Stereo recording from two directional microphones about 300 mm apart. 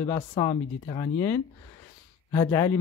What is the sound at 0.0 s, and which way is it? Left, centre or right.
Speech, centre.